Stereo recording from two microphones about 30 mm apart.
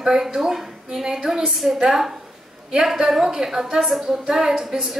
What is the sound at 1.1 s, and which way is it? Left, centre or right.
Speech, right.